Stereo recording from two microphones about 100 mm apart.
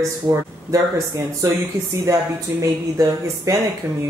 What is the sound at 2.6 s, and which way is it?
Speech, 35° right (ahead or behind).